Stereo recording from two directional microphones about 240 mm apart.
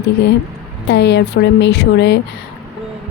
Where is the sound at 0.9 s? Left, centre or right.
Left.